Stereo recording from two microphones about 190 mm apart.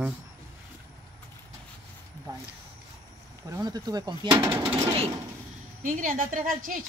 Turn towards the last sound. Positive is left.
turn(degrees=-45)  # may be behind; listen again after turning